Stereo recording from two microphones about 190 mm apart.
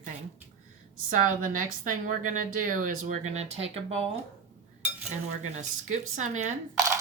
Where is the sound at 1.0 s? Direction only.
45° right (ahead or behind).